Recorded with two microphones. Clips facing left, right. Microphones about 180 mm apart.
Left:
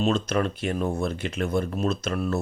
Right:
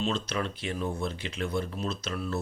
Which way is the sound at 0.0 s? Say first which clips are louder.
Left 7 dB; 50° left (ahead or behind).